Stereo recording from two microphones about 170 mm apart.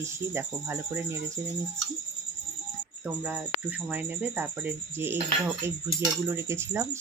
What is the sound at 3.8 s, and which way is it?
Speech, 10° right (ahead or behind).